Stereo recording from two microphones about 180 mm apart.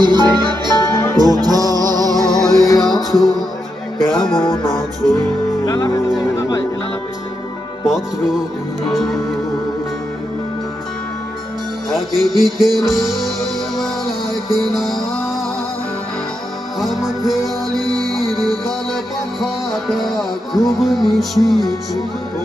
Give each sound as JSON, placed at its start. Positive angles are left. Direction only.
{"t": 0.0, "sound": "music", "side_deg": -25}
{"t": 2.2, "sound": "music", "side_deg": 5}
{"t": 2.6, "sound": "music", "side_deg": 20}
{"t": 3.0, "sound": "music", "side_deg": 0}
{"t": 5.6, "sound": "speech", "side_deg": 20}
{"t": 7.9, "sound": "music", "side_deg": 0}
{"t": 11.9, "sound": "music", "side_deg": 0}
{"t": 14.5, "sound": "music", "side_deg": 0}
{"t": 16.8, "sound": "music", "side_deg": 0}
{"t": 17.7, "sound": "music", "side_deg": -20}
{"t": 19.4, "sound": "music", "side_deg": 0}